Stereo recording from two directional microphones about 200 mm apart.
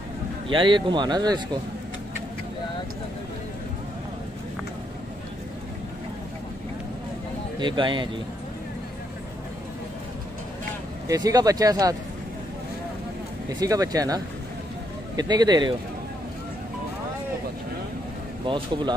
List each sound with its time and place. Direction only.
0.5 s speech: 25° right (ahead or behind)
7.6 s speech: 25° right (ahead or behind)
11.1 s speech: 20° right (ahead or behind)
13.5 s speech: 20° right (ahead or behind)
18.4 s speech: 25° right (ahead or behind)